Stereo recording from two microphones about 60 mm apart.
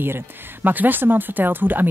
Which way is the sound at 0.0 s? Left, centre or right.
Right.